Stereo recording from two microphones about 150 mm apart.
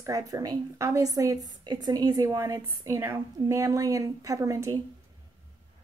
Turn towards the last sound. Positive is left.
turn(degrees=-20)  # may be behind; listen again after turning